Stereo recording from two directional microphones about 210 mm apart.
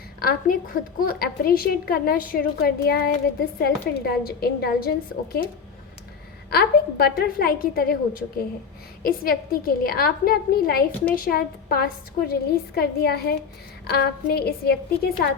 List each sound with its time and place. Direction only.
0.2 s a woman's voice: 40° left (ahead or behind)
6.5 s a woman's voice: 50° left (ahead or behind)